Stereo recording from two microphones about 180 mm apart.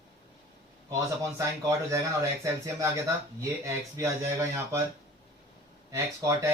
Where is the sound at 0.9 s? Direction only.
15° right (ahead or behind).